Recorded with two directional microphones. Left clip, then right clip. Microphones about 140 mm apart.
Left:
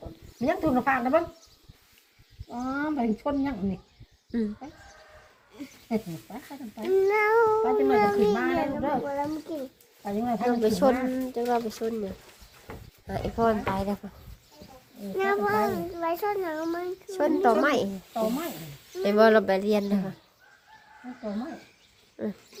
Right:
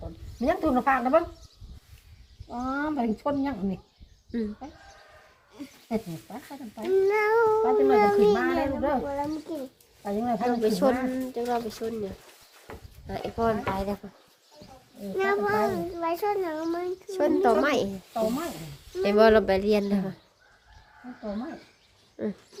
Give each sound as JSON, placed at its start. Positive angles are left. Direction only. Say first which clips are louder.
{"t": 0.0, "sound": "speech", "louder": "right 1 dB", "side_deg": -5}
{"t": 2.5, "sound": "speech", "louder": "right 1 dB", "side_deg": -5}
{"t": 4.3, "sound": "speech", "louder": "left 1 dB", "side_deg": 5}
{"t": 5.9, "sound": "speech", "louder": "even", "side_deg": -5}
{"t": 9.5, "sound": "a sound", "louder": "even", "side_deg": -5}
{"t": 10.2, "sound": "speech", "louder": "even", "side_deg": -15}
{"t": 10.5, "sound": "speech", "louder": "left 2 dB", "side_deg": 15}
{"t": 13.1, "sound": "speech", "louder": "left 2 dB", "side_deg": 25}
{"t": 15.1, "sound": "speech", "louder": "even", "side_deg": 0}
{"t": 17.1, "sound": "speech", "louder": "even", "side_deg": 5}
{"t": 18.1, "sound": "speech", "louder": "right 1 dB", "side_deg": -5}
{"t": 22.2, "sound": "speech", "louder": "right 1 dB", "side_deg": -20}